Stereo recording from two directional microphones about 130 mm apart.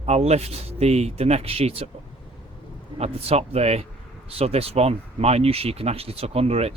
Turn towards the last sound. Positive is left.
turn(degrees=-50)  # may be behind; listen again after turning